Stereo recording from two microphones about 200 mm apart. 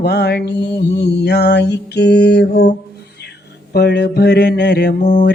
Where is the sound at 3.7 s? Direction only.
55° left (ahead or behind).